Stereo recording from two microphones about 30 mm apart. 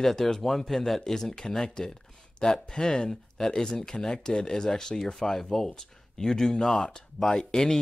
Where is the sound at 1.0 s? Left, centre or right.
Centre.